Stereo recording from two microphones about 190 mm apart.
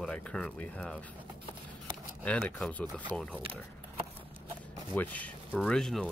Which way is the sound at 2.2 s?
5° left (ahead or behind).